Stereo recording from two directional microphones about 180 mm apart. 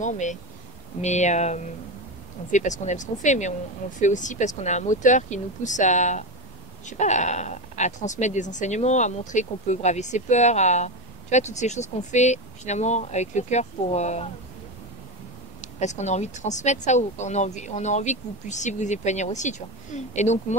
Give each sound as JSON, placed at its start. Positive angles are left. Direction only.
{"t": 0.0, "sound": "speech", "side_deg": 45}
{"t": 15.6, "sound": "speech", "side_deg": 40}